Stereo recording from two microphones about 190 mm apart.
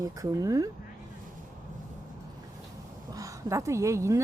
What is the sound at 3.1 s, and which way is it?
Speech, 15° right (ahead or behind).